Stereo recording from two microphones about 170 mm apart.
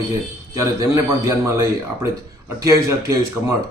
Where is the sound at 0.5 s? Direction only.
15° right (ahead or behind).